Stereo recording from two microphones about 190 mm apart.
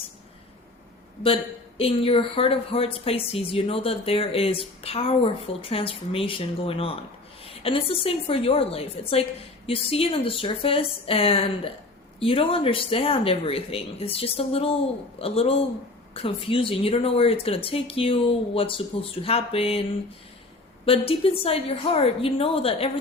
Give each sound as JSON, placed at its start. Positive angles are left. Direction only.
{"t": 1.8, "sound": "a woman's voice", "side_deg": 30}
{"t": 20.8, "sound": "a woman's voice", "side_deg": 30}